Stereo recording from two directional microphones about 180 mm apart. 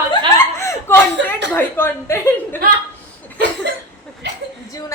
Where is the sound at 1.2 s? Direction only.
80° right.